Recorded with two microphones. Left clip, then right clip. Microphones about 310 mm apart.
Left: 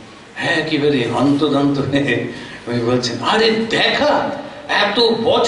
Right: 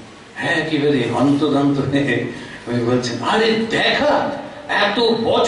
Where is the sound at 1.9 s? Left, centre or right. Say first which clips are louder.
Left 1 dB; centre.